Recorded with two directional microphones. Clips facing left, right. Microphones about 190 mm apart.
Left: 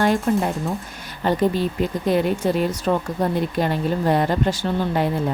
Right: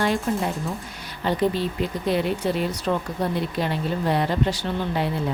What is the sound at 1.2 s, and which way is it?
Speech, 45° left (ahead or behind).